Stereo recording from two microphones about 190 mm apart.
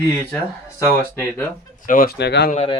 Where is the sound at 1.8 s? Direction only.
45° left (ahead or behind); by 2.4 s 60° left (ahead or behind).